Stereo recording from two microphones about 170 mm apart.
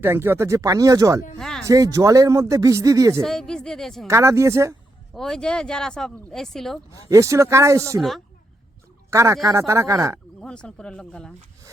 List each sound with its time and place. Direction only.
0.0 s speech: 15° right (ahead or behind)
1.4 s music: centre (ahead or behind)
1.6 s speech: 20° right (ahead or behind)
3.2 s speech: 5° left (ahead or behind)
4.0 s a man's voice: 15° right (ahead or behind)
5.1 s speech: 5° left (ahead or behind)
6.9 s a man's voice: 20° right (ahead or behind)
9.0 s a man's voice: 15° right (ahead or behind)
10.4 s speech: 5° left (ahead or behind)